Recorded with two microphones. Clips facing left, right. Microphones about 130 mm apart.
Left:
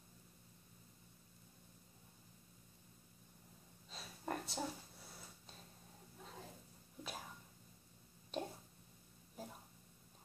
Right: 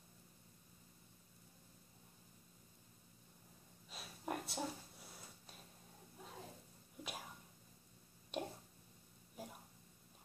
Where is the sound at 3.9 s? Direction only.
5° right (ahead or behind).